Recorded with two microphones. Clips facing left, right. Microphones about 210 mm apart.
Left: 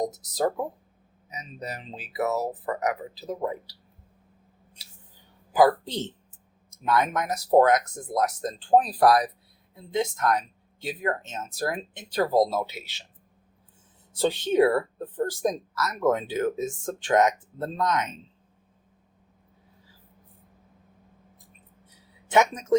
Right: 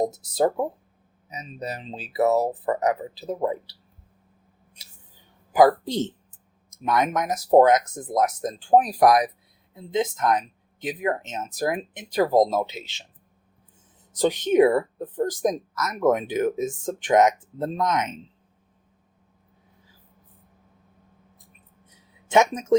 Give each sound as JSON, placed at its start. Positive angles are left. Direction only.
{"t": 0.0, "sound": "speech", "side_deg": -25}
{"t": 5.5, "sound": "speech", "side_deg": -15}
{"t": 14.1, "sound": "speech", "side_deg": -15}
{"t": 21.8, "sound": "a sound", "side_deg": -20}